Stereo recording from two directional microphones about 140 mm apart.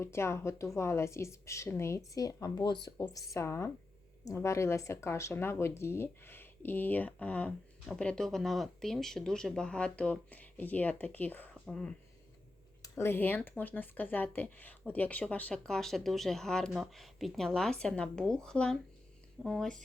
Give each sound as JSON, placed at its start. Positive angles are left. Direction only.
{"t": 0.0, "sound": "speech", "side_deg": 20}
{"t": 12.8, "sound": "speech", "side_deg": 20}